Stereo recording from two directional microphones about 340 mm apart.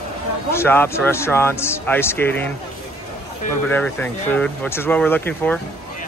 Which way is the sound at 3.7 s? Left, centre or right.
Centre.